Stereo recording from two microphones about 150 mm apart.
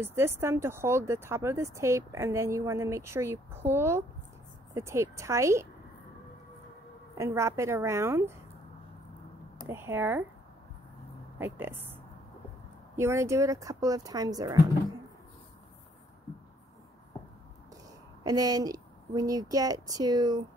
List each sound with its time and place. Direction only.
0.0 s a woman's voice: 15° right (ahead or behind)
7.2 s a woman's voice: 20° right (ahead or behind)
9.7 s speech: 15° right (ahead or behind)
11.3 s a woman's voice: 15° right (ahead or behind)
18.2 s a woman's voice: 25° right (ahead or behind)